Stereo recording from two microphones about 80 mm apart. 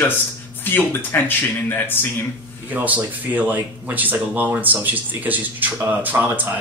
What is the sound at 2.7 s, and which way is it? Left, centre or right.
Speech, centre.